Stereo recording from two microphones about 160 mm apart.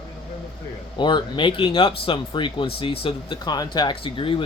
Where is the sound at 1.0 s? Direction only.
30° left (ahead or behind).